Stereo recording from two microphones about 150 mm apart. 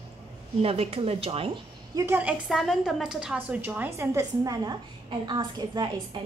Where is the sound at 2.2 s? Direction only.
5° right (ahead or behind); by 6.2 s 30° right (ahead or behind).